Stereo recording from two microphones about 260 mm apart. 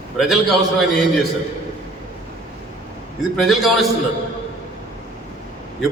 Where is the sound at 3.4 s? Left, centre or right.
Centre.